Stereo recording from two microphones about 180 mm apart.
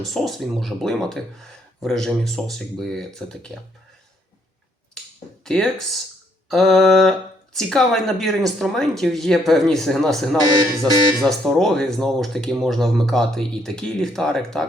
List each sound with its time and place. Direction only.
0.0 s speech: centre (ahead or behind)
5.5 s speech: 5° left (ahead or behind)
10.5 s speech: 20° right (ahead or behind)
11.2 s speech: centre (ahead or behind)